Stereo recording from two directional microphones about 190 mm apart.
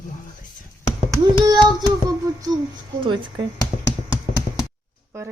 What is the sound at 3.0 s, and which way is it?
Speech, 25° right (ahead or behind).